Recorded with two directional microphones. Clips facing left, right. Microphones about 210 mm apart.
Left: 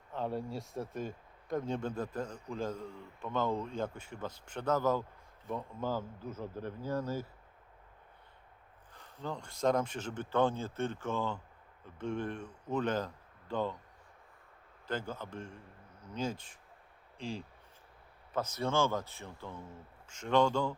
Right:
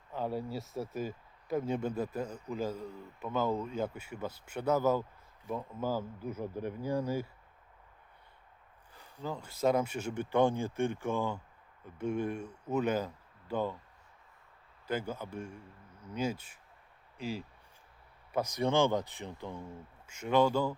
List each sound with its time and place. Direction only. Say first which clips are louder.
0.1 s speech: right 1 dB; centre (ahead or behind)
8.9 s speech: right 1 dB; 5° right (ahead or behind)
14.8 s speech: right 3 dB; 10° right (ahead or behind)